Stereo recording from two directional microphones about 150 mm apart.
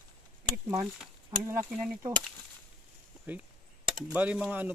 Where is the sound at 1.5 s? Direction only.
10° right (ahead or behind).